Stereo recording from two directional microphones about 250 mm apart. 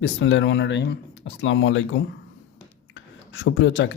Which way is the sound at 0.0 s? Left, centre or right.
Left.